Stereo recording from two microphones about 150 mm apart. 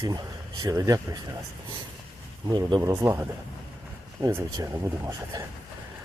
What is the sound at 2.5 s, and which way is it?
Speech, 30° right (ahead or behind).